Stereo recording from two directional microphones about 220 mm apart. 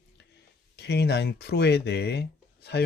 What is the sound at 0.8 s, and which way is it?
Speech, 50° left (ahead or behind).